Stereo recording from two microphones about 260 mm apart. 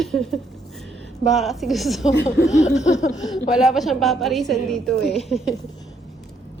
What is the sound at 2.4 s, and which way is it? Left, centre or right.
Laughter, left.